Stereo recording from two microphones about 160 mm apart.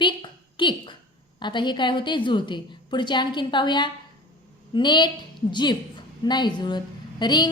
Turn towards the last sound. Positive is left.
turn(degrees=25)  # may be behind; listen again after turning